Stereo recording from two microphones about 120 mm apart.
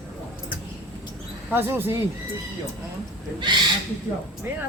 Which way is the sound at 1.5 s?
15° right (ahead or behind).